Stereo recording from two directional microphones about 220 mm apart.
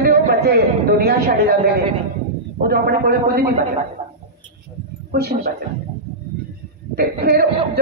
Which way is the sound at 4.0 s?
30° right (ahead or behind).